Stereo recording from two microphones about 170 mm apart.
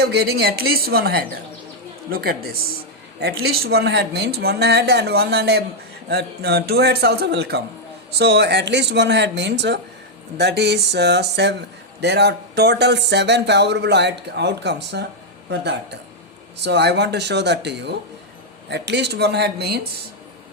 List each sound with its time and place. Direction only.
0.0 s speech: 70° right (ahead or behind); by 9.8 s 90° right
10.3 s speech: 80° right